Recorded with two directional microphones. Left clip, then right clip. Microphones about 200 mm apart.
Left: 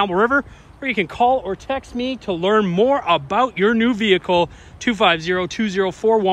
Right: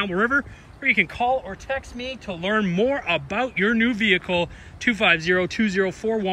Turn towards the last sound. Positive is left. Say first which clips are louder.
# left 6 dB
turn(degrees=15)  # may be behind; listen again after turning